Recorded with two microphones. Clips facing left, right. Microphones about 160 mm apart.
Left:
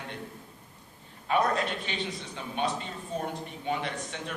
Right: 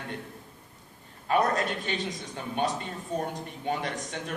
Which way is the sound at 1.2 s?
45° right (ahead or behind).